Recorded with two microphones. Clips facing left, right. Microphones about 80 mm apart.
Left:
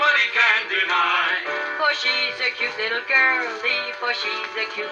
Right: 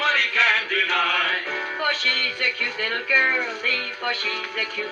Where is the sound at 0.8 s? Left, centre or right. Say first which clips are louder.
Left 5 dB; left.